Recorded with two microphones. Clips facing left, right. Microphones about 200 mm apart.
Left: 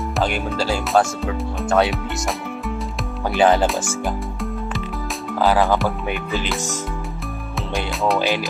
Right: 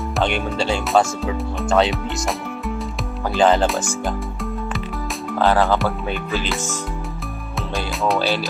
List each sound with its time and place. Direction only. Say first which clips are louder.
0.2 s speech: right 1 dB; 5° left (ahead or behind)
3.3 s speech: even; 10° left (ahead or behind)